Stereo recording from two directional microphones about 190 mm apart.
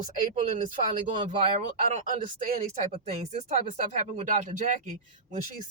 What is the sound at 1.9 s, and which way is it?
Speech, 45° right (ahead or behind).